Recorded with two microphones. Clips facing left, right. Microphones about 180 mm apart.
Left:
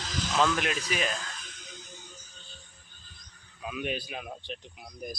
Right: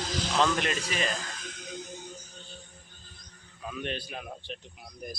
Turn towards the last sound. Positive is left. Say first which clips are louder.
# left 2 dB
turn(degrees=0)  # may be behind; listen again after turning